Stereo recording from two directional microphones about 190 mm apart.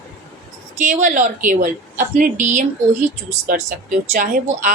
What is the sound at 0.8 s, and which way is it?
A woman's voice, 40° right (ahead or behind).